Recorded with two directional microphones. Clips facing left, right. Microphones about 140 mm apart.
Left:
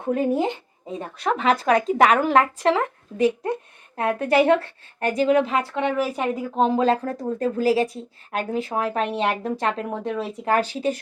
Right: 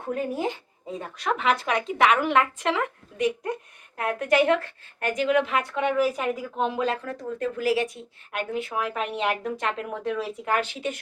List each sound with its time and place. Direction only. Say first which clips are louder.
0.1 s speech: left 6 dB; 25° left (ahead or behind)
1.2 s speech: left 4 dB; 35° left (ahead or behind)